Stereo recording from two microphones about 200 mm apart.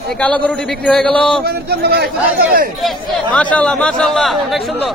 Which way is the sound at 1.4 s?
50° right (ahead or behind).